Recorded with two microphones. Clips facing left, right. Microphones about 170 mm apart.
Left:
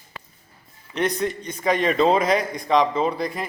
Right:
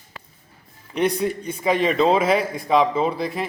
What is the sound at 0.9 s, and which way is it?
A man's voice, 10° right (ahead or behind).